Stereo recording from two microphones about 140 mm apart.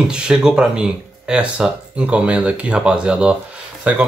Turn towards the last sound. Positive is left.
turn(degrees=-10)  # may be behind; listen again after turning